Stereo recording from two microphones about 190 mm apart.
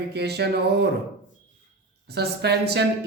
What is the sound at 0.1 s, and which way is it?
Speech, 60° right (ahead or behind).